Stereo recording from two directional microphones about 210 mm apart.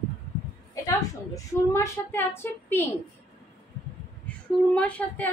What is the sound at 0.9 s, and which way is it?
A woman's voice, 15° left (ahead or behind).